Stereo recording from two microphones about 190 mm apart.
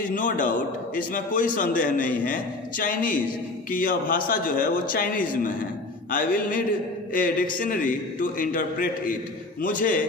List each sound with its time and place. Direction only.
0.1 s a man's voice: 45° left (ahead or behind)